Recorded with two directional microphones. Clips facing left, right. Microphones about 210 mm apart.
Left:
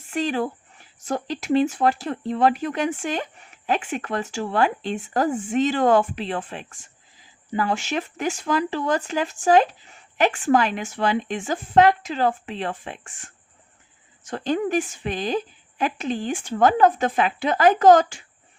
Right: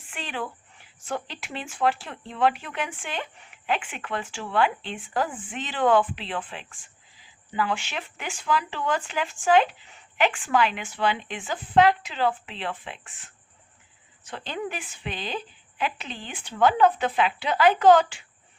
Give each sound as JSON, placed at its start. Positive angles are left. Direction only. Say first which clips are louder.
{"t": 0.1, "sound": "speech", "louder": "left 10 dB", "side_deg": 40}